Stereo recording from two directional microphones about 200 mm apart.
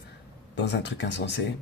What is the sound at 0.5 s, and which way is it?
Speech, 60° left (ahead or behind).